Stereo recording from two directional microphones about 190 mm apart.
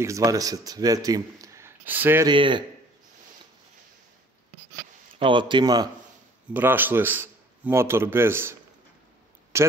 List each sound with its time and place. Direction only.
0.0 s a man's voice: 15° right (ahead or behind)
2.2 s speech: 25° right (ahead or behind)
5.2 s speech: 25° right (ahead or behind)
6.5 s a man's voice: 10° right (ahead or behind)